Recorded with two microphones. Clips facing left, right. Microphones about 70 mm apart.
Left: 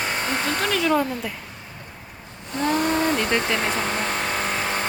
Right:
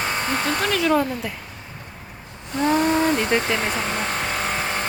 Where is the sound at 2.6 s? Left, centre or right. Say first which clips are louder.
Right 3 dB; centre.